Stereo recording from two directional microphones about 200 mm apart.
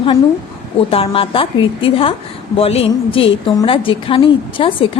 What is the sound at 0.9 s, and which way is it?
A woman's voice, 25° left (ahead or behind).